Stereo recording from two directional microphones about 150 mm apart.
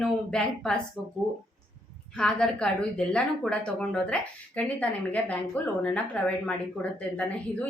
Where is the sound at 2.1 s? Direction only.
5° left (ahead or behind).